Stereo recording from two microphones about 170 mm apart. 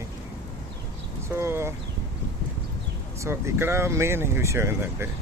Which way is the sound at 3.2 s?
15° right (ahead or behind).